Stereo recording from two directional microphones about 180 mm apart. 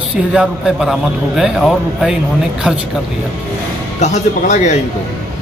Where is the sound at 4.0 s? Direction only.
40° left (ahead or behind).